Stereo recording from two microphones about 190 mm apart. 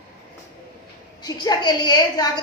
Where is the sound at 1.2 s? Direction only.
20° left (ahead or behind).